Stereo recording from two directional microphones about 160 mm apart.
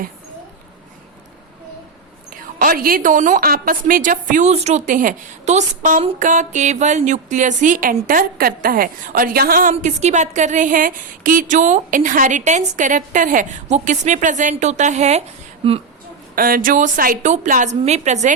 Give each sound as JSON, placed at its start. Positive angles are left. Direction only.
{"t": 2.3, "sound": "a woman's voice", "side_deg": -65}
{"t": 16.3, "sound": "a woman's voice", "side_deg": -65}